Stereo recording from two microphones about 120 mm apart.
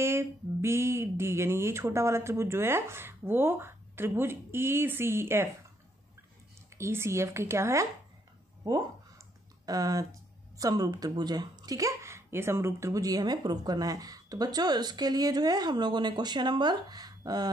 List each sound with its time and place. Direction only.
0.0 s speech: 20° right (ahead or behind)
6.8 s speech: 20° right (ahead or behind)